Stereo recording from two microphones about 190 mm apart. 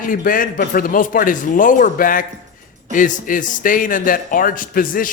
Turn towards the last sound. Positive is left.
turn(degrees=45)  # may be behind; listen again after turning